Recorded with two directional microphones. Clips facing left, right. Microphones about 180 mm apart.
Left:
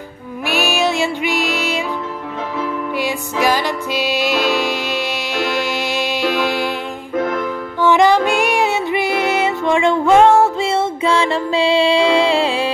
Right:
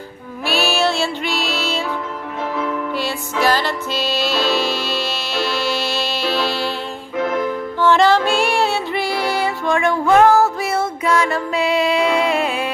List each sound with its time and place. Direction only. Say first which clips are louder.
0.5 s music: left 1 dB; 15° left (ahead or behind)
3.0 s music: left 4 dB; 15° left (ahead or behind)
7.8 s music: left 2 dB; 15° left (ahead or behind)